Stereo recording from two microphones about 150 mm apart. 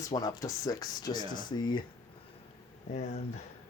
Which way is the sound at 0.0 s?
25° left (ahead or behind).